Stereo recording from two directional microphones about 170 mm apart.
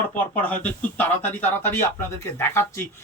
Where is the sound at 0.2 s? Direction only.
10° left (ahead or behind).